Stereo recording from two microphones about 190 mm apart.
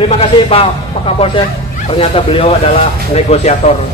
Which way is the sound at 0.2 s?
30° left (ahead or behind).